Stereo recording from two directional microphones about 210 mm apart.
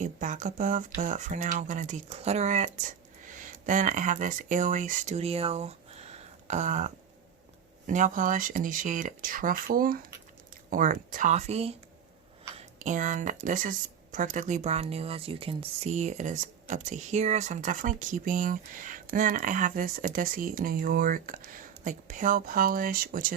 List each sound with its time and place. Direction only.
0.0 s speech: 35° right (ahead or behind)